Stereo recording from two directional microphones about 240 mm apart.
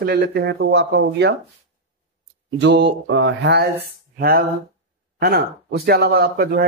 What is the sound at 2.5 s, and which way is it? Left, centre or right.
Speech, right.